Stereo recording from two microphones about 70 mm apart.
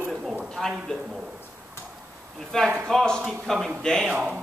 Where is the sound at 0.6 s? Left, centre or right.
Centre.